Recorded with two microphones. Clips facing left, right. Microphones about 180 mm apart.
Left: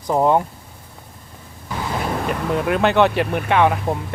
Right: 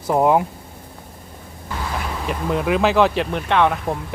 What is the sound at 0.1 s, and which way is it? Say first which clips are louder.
Speech: even; 5° right (ahead or behind).